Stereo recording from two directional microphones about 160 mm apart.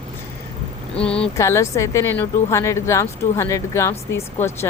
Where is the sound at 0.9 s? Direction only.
5° left (ahead or behind).